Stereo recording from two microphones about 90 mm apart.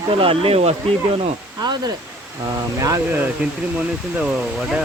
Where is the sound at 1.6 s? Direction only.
50° right (ahead or behind).